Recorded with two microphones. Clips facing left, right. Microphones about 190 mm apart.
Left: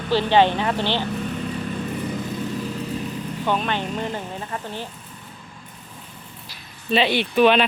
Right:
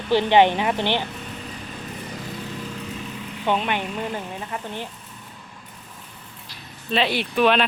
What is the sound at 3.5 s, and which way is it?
Speech, 15° right (ahead or behind).